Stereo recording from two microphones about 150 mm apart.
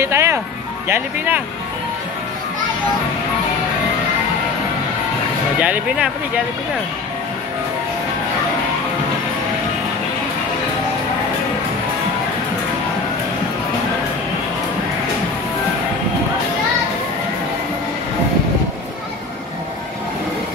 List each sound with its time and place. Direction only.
0.0 s music: 20° right (ahead or behind)
0.8 s speech: 15° right (ahead or behind)
5.6 s speech: 5° right (ahead or behind)